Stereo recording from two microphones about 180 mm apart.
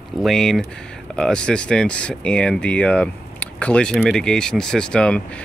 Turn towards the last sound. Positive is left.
turn(degrees=5)  # may be behind; listen again after turning